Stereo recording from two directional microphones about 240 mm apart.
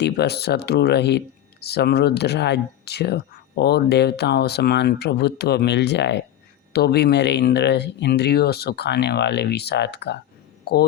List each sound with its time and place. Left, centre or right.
0.0 s speech: left